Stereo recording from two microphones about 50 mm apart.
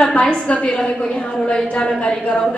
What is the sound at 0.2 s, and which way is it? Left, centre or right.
A woman's voice, left.